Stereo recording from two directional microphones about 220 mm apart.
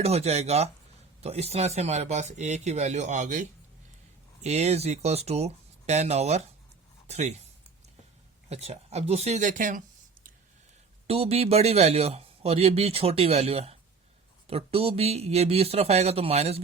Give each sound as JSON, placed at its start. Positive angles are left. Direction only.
{"t": 0.0, "sound": "a man's voice", "side_deg": -30}
{"t": 8.4, "sound": "a man's voice", "side_deg": -30}
{"t": 11.0, "sound": "a man's voice", "side_deg": -25}